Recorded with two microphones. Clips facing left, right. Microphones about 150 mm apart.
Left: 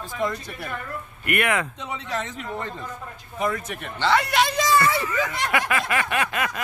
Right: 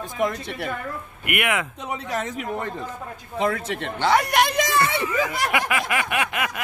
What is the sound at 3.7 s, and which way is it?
Speech, 90° right.